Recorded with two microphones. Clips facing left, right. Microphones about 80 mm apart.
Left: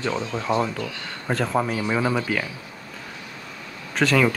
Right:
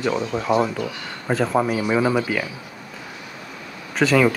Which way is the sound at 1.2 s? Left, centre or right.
Centre.